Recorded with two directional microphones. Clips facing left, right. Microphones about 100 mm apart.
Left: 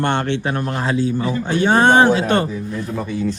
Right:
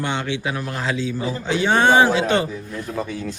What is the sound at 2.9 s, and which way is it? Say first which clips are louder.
Speech: right 3 dB; 5° left (ahead or behind).